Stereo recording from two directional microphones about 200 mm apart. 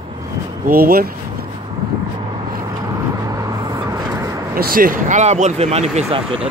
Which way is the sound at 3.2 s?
20° right (ahead or behind).